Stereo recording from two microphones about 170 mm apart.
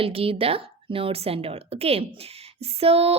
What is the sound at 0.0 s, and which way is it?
A woman's voice, 35° right (ahead or behind).